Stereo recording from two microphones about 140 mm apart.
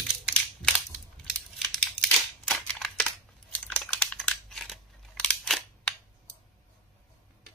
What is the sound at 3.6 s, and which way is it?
Typing, 10° left (ahead or behind).